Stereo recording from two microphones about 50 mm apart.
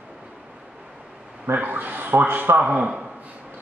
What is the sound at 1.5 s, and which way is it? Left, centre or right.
A man's voice, right.